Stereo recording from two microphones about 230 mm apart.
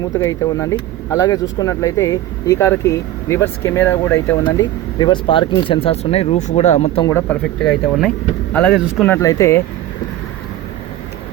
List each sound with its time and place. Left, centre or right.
0.1 s speech: centre
7.1 s speech: centre